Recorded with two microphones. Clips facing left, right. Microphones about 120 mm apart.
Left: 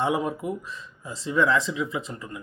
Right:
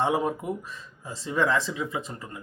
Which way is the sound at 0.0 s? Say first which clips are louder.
Even; 35° right (ahead or behind).